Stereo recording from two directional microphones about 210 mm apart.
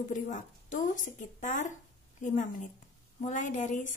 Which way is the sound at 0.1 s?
35° left (ahead or behind).